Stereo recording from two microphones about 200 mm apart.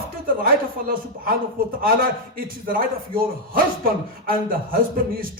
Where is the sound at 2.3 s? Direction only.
45° right (ahead or behind).